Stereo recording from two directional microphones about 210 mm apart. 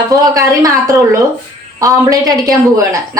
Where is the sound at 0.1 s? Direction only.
15° right (ahead or behind).